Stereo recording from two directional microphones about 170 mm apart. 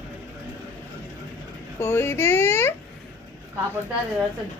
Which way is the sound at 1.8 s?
15° left (ahead or behind).